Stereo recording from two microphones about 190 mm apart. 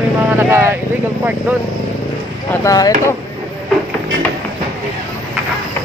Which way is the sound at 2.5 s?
20° left (ahead or behind).